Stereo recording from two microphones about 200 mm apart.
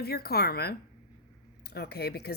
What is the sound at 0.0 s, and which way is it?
Speech, 50° left (ahead or behind).